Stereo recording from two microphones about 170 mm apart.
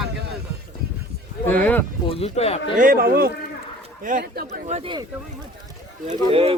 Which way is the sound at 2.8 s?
55° right (ahead or behind).